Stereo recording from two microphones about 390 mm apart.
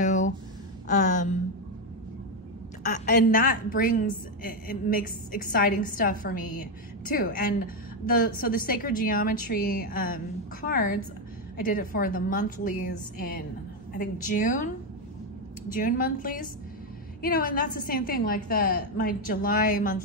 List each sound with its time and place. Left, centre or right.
0.0 s a sound: centre
0.8 s a woman's voice: centre
2.8 s a woman's voice: centre
15.7 s a woman's voice: left